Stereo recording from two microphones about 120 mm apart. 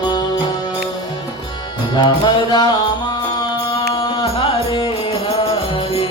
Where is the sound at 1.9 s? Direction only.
40° left (ahead or behind).